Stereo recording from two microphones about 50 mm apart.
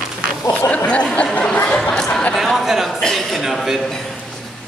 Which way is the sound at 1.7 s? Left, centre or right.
Centre.